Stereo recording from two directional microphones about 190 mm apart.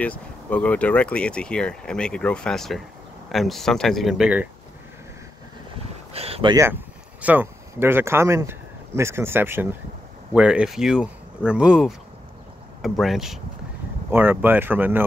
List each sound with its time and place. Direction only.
0.0 s speech: 5° left (ahead or behind)
6.1 s speech: 30° right (ahead or behind)
6.5 s speech: 10° right (ahead or behind)
13.0 s speech: centre (ahead or behind)